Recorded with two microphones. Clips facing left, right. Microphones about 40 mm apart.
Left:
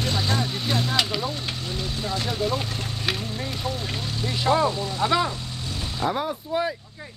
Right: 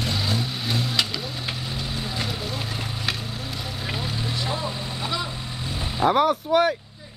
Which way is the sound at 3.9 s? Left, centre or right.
Centre.